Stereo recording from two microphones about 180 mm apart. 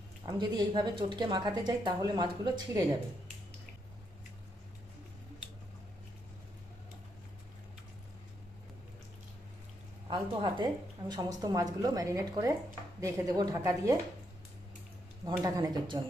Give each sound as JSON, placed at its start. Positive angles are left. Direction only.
{"t": 0.3, "sound": "speech", "side_deg": -25}
{"t": 10.1, "sound": "a woman's voice", "side_deg": -25}
{"t": 15.2, "sound": "speech", "side_deg": -20}